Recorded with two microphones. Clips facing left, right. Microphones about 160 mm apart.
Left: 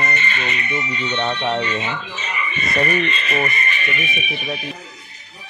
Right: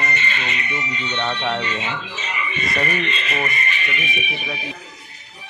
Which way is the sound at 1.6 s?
50° left (ahead or behind).